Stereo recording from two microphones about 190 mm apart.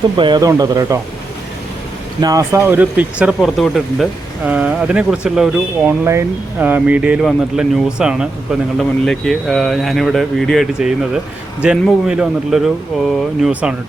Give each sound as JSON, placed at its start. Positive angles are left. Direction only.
{"t": 0.2, "sound": "speech", "side_deg": -20}
{"t": 2.2, "sound": "speech", "side_deg": -15}